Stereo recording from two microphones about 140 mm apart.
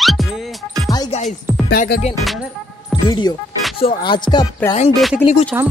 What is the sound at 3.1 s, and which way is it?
Speech, 30° left (ahead or behind).